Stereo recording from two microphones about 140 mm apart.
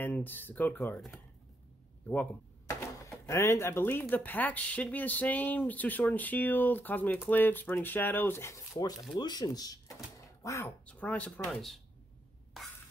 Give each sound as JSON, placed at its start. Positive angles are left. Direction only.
{"t": 0.0, "sound": "speech", "side_deg": 15}
{"t": 2.0, "sound": "cash register", "side_deg": 15}
{"t": 4.1, "sound": "speech", "side_deg": 15}
{"t": 9.2, "sound": "speech", "side_deg": 30}
{"t": 10.9, "sound": "speech", "side_deg": 10}